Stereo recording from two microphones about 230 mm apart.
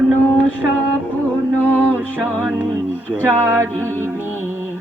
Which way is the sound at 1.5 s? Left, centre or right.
Centre.